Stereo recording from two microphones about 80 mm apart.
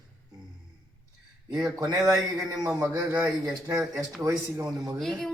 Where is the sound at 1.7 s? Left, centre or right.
Right.